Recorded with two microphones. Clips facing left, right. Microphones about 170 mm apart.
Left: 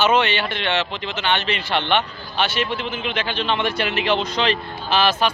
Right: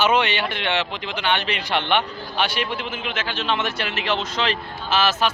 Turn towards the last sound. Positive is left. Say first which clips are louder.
# left 2 dB
turn(degrees=-5)  # may be behind; listen again after turning